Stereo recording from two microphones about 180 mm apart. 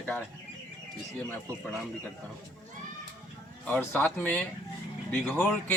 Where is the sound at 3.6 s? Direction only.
10° left (ahead or behind).